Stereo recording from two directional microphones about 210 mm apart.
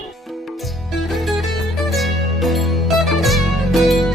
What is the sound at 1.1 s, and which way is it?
Music, centre (ahead or behind).